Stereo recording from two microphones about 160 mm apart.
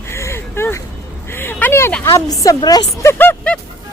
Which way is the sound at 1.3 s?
15° left (ahead or behind).